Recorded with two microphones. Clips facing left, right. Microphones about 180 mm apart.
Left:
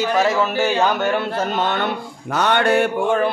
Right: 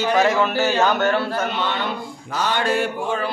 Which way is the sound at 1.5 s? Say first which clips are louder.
Left 3 dB; 50° left (ahead or behind).